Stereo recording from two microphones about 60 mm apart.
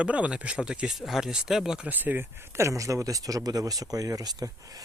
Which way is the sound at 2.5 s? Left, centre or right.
Right.